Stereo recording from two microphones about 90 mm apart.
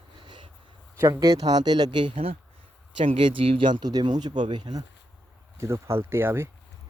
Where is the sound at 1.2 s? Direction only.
40° right (ahead or behind); by 2.3 s 70° right (ahead or behind).